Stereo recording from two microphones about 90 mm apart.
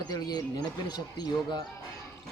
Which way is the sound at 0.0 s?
50° left (ahead or behind).